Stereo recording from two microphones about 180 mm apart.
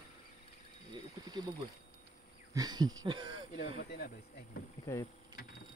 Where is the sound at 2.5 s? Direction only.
20° right (ahead or behind).